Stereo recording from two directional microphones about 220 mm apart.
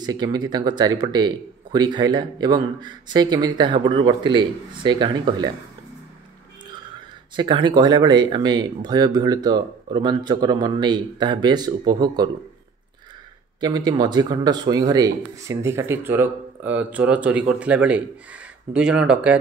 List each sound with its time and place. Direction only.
0.0 s speech: 20° right (ahead or behind)
7.3 s speech: 20° right (ahead or behind)
13.6 s speech: 20° right (ahead or behind)